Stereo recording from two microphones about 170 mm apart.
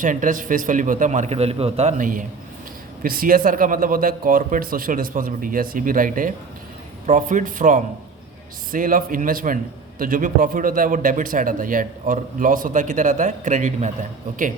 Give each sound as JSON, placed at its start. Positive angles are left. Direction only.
{"t": 0.0, "sound": "a man's voice", "side_deg": -50}